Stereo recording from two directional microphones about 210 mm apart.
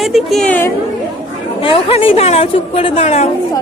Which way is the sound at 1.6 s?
25° left (ahead or behind).